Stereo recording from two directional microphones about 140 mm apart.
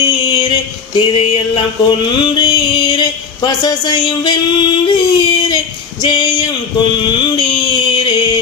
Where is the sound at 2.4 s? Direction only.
30° left (ahead or behind).